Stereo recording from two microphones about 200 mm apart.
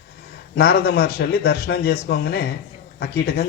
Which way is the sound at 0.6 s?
50° left (ahead or behind).